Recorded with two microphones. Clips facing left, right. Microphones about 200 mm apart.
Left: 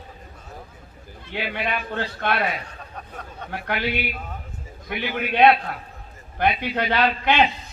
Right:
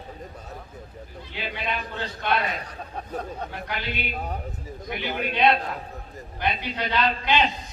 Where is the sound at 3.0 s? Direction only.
35° right (ahead or behind).